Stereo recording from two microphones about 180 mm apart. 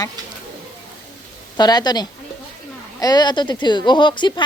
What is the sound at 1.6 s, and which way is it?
Speech, 25° left (ahead or behind).